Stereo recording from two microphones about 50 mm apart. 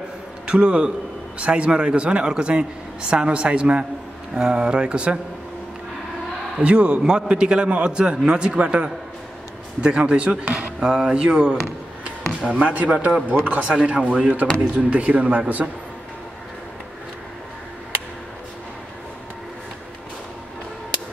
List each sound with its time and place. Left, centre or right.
0.5 s a man's voice: centre
6.6 s a man's voice: right
10.9 s a man's voice: centre
14.9 s a man's voice: right